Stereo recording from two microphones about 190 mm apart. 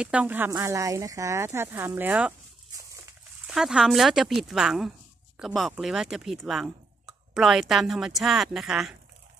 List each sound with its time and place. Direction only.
0.0 s speech: 5° right (ahead or behind)
3.4 s a woman's voice: 5° right (ahead or behind)